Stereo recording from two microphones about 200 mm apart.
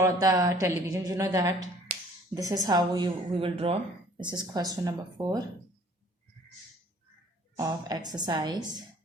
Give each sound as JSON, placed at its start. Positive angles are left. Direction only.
{"t": 0.0, "sound": "a woman's voice", "side_deg": -15}
{"t": 7.5, "sound": "a woman's voice", "side_deg": -20}